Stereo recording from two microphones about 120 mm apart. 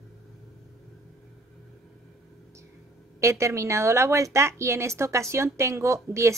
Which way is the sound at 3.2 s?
25° right (ahead or behind).